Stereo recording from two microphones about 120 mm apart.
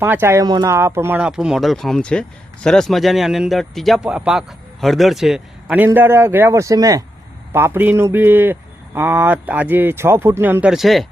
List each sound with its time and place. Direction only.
0.0 s speech: 20° right (ahead or behind)
0.4 s speech: 35° right (ahead or behind)
0.7 s speech: 20° right (ahead or behind)
1.2 s speech: 5° right (ahead or behind); by 7.0 s 30° right (ahead or behind)
7.5 s speech: 20° right (ahead or behind); by 11.0 s centre (ahead or behind)